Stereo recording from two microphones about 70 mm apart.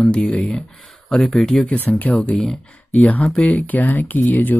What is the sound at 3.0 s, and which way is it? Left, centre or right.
Speech, left.